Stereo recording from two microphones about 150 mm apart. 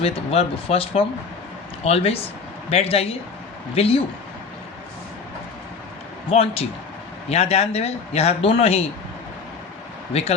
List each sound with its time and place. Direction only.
0.0 s speech: 40° left (ahead or behind)
6.3 s a man's voice: 40° left (ahead or behind)
10.1 s speech: 45° left (ahead or behind)